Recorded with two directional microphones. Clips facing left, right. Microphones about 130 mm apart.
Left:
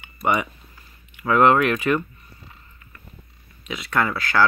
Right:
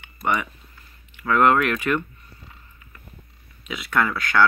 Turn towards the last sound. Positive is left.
turn(degrees=0)  # may be behind; listen again after turning